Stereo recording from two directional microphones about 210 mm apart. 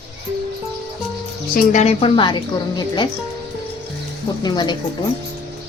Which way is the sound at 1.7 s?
30° left (ahead or behind).